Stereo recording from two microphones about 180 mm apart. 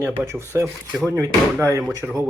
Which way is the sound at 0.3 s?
15° right (ahead or behind).